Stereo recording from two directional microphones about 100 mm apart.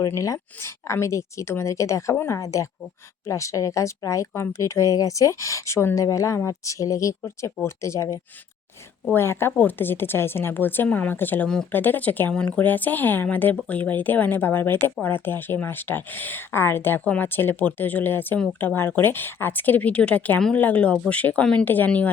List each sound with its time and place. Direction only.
0.0 s speech: 35° left (ahead or behind); by 22.1 s 15° left (ahead or behind)